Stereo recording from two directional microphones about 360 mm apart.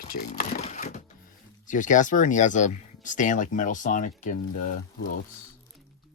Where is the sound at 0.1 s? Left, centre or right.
Left.